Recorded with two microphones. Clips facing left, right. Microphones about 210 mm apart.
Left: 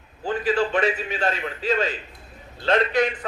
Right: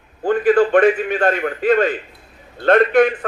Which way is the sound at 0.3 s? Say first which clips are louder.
Right 9 dB; 55° right (ahead or behind).